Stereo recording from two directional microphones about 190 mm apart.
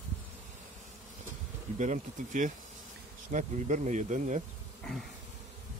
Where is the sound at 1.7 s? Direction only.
40° right (ahead or behind).